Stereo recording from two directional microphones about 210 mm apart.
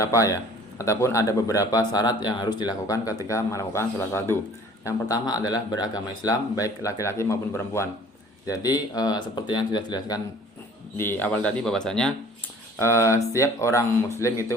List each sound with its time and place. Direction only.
0.0 s speech: 15° left (ahead or behind)
10.9 s speech: 10° left (ahead or behind)
12.8 s speech: 15° left (ahead or behind)